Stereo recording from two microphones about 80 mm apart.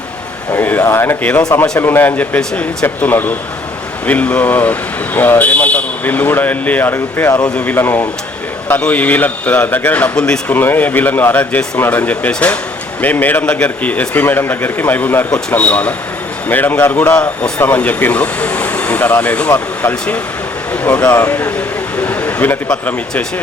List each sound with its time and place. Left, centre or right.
0.5 s speech: left
1.2 s speech: centre
10.2 s speech: centre
10.5 s speech: left